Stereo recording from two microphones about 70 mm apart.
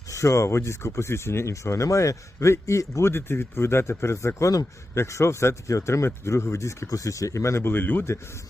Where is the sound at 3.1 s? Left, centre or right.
Left.